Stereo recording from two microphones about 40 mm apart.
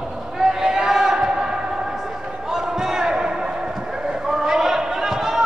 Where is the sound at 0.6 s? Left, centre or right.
Centre.